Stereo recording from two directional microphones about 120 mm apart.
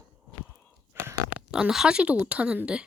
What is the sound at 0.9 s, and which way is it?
Burping, 20° right (ahead or behind).